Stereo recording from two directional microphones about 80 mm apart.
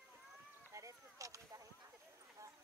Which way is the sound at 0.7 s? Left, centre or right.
Right.